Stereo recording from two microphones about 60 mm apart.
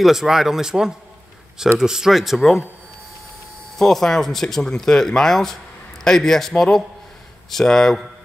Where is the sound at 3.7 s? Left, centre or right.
Centre.